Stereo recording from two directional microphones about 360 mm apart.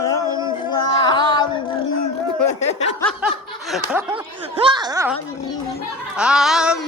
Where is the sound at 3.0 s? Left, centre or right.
Centre.